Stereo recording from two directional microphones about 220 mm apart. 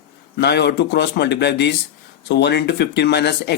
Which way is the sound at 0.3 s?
50° left (ahead or behind).